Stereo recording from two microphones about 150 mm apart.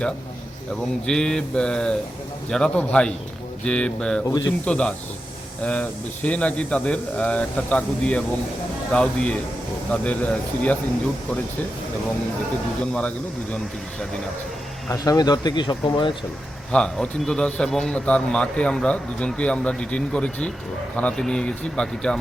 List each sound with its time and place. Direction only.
1.0 s a man's voice: 5° left (ahead or behind)
12.8 s a man's voice: 10° left (ahead or behind)
14.8 s speech: 20° left (ahead or behind)
16.7 s a man's voice: 5° left (ahead or behind)